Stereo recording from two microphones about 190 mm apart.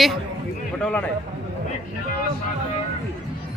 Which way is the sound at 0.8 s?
5° left (ahead or behind).